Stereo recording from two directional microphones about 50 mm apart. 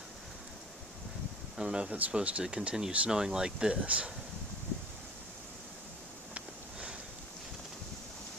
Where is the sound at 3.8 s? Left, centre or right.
Right.